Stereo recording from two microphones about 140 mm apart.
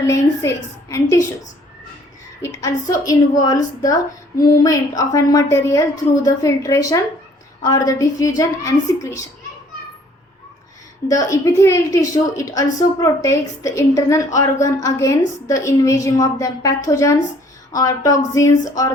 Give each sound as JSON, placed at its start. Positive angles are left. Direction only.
{"t": 0.1, "sound": "a woman's voice", "side_deg": 20}
{"t": 2.4, "sound": "a woman's voice", "side_deg": 25}
{"t": 11.1, "sound": "a woman's voice", "side_deg": 25}